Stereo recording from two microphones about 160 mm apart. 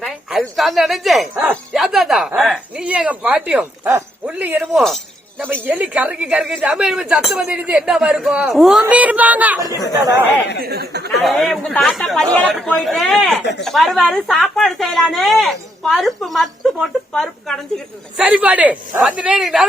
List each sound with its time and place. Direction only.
0.0 s speech: centre (ahead or behind)
4.6 s a woman's voice: centre (ahead or behind)
5.6 s a woman's voice: 10° right (ahead or behind)
10.6 s speech: 85° right
11.2 s a woman's voice: centre (ahead or behind)
13.4 s speech: 90° left
13.7 s a woman's voice: centre (ahead or behind)
18.2 s speech: 10° right (ahead or behind)